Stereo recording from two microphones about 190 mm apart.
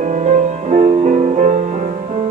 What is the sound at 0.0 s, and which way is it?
Music, 40° right (ahead or behind).